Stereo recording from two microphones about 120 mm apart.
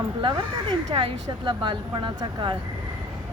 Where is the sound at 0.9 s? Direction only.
50° right (ahead or behind).